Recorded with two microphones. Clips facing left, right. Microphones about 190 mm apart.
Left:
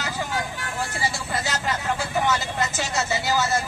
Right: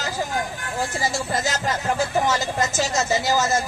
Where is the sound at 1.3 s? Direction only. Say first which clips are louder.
Right 3 dB; 45° right (ahead or behind).